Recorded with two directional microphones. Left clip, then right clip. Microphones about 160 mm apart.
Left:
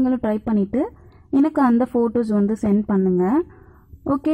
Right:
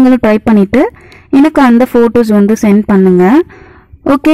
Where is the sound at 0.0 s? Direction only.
40° right (ahead or behind).